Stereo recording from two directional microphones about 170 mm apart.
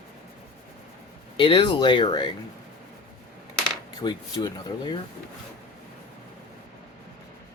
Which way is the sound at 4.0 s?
25° left (ahead or behind).